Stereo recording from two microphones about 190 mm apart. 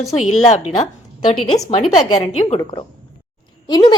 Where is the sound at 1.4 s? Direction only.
20° left (ahead or behind).